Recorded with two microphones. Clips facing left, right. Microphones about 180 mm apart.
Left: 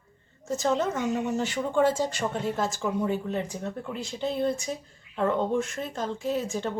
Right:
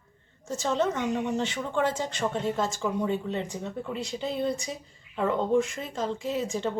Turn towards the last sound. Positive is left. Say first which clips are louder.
# even
turn(degrees=0)  # may be behind; listen again after turning